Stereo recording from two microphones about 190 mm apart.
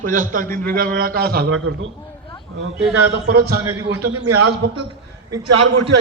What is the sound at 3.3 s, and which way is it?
Speech, 55° right (ahead or behind).